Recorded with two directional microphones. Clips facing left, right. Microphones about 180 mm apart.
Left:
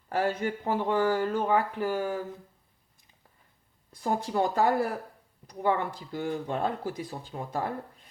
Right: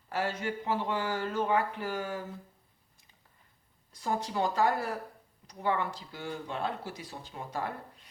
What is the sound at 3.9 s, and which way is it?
Speech, 55° left (ahead or behind).